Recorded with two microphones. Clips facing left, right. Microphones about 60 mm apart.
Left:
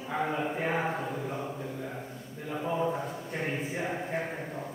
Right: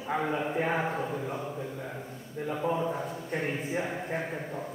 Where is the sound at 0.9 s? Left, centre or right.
Centre.